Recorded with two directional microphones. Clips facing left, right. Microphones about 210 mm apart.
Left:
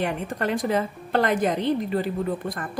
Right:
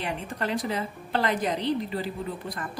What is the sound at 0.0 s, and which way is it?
A woman's voice, 50° left (ahead or behind).